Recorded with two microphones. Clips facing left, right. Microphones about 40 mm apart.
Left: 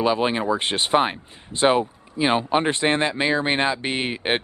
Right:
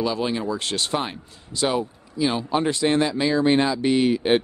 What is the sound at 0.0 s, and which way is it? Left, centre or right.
Speech, left.